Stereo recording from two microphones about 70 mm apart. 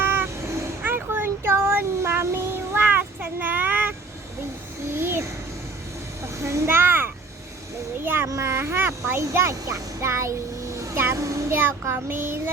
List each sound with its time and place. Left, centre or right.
0.0 s vehicle: right
0.8 s child singing: right
4.9 s a sound: right
6.2 s a sound: right
9.0 s a child's voice: right
10.8 s child singing: right